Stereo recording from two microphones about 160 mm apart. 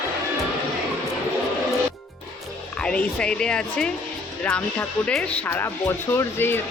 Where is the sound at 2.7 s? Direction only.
5° left (ahead or behind).